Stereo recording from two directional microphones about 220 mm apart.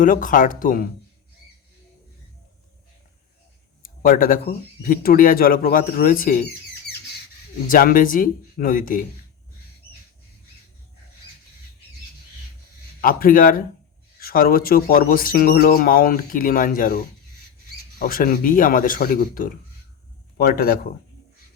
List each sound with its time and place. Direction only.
0.0 s speech: 40° left (ahead or behind)
3.8 s speech: 40° left (ahead or behind)
7.7 s speech: 40° left (ahead or behind)
13.0 s speech: 40° left (ahead or behind)
18.0 s a man's voice: 40° left (ahead or behind)